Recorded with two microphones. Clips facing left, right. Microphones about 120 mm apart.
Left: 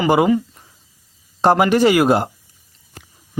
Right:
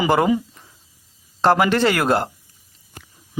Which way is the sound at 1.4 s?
15° left (ahead or behind).